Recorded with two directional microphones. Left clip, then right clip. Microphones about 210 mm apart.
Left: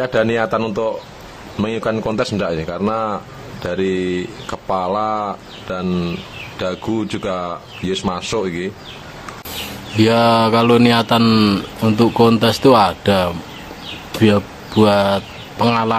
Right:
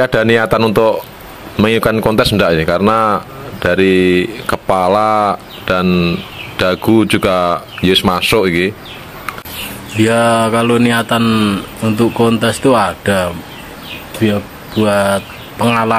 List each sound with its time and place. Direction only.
0.0 s speech: 20° right (ahead or behind)
5.9 s speech: 5° right (ahead or behind)
9.9 s speech: 15° left (ahead or behind)